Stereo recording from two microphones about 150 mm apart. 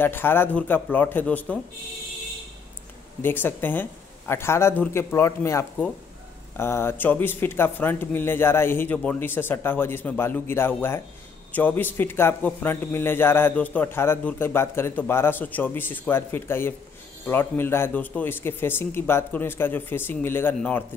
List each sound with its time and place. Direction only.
0.0 s a man's voice: 15° left (ahead or behind)
3.2 s a man's voice: 15° left (ahead or behind)